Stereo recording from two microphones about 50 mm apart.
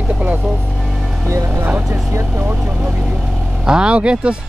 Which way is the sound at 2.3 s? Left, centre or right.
Right.